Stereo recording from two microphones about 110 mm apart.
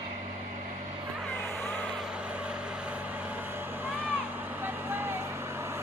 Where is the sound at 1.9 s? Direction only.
10° right (ahead or behind).